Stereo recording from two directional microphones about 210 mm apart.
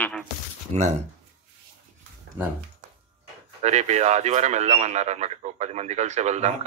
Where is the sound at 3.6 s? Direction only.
30° right (ahead or behind).